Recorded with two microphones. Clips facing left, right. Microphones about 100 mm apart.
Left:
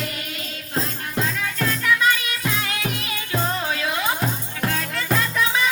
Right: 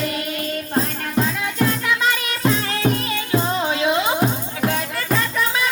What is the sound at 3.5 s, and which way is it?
Music, 25° right (ahead or behind).